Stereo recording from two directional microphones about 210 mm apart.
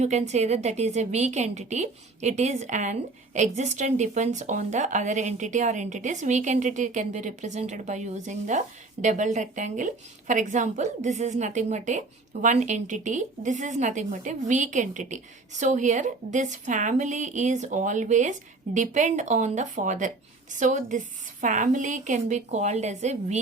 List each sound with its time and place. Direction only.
0.0 s a woman's voice: 35° right (ahead or behind)